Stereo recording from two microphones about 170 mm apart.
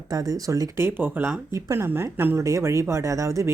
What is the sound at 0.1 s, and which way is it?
Speech, 20° right (ahead or behind).